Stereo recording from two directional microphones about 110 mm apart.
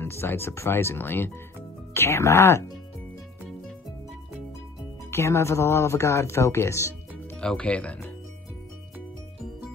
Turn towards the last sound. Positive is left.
turn(degrees=10)  # may be behind; listen again after turning